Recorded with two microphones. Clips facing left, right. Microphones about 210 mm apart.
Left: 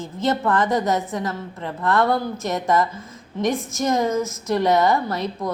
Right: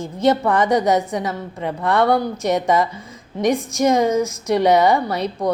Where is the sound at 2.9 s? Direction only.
Centre (ahead or behind).